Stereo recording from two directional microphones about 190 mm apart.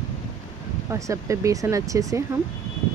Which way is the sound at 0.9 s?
15° right (ahead or behind).